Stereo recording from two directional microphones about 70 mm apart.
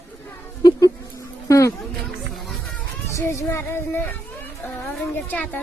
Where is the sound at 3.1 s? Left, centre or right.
Left.